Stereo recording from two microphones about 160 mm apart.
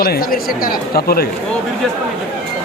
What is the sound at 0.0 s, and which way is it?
Speech, 70° left (ahead or behind).